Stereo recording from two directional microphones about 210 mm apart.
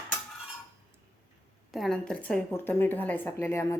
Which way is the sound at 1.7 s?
Centre (ahead or behind).